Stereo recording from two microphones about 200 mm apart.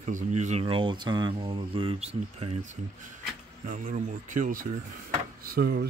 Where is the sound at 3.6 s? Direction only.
40° right (ahead or behind).